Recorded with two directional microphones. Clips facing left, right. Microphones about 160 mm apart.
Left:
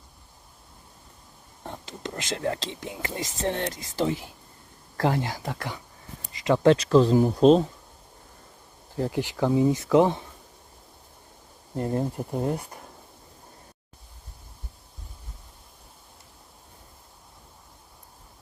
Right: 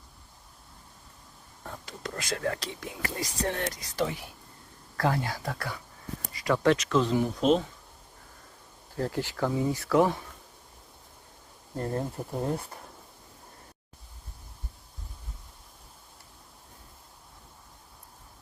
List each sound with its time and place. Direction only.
1.6 s speech: 25° left (ahead or behind)
9.0 s speech: 15° left (ahead or behind)
11.8 s speech: 15° left (ahead or behind)